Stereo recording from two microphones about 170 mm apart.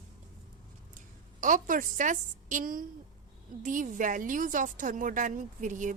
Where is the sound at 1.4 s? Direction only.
50° right (ahead or behind).